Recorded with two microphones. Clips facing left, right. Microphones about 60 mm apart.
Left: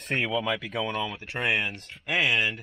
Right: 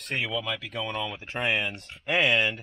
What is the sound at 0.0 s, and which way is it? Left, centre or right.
Speech, centre.